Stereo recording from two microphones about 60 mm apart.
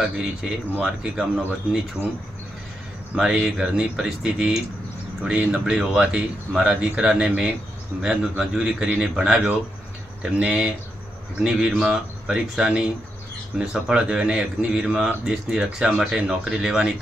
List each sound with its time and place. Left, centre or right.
0.0 s speech: centre
3.2 s speech: centre